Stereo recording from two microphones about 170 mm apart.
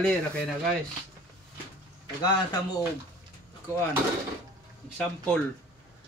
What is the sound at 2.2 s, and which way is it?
Speech, 25° left (ahead or behind).